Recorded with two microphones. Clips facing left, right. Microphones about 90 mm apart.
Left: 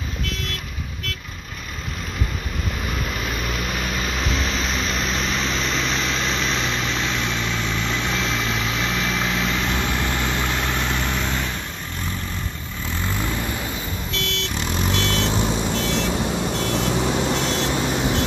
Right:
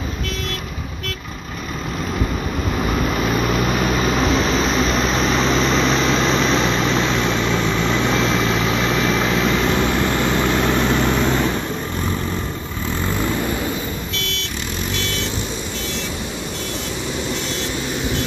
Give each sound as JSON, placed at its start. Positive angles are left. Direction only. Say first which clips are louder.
{"t": 2.9, "sound": "vehicle", "louder": "right 9 dB", "side_deg": -60}
{"t": 4.5, "sound": "vehicle", "louder": "right 7 dB", "side_deg": -40}
{"t": 6.4, "sound": "vehicle", "louder": "right 7 dB", "side_deg": -40}
{"t": 16.7, "sound": "vehicle", "louder": "left 5 dB", "side_deg": 55}